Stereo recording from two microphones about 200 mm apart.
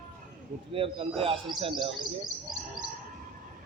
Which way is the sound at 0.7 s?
30° right (ahead or behind).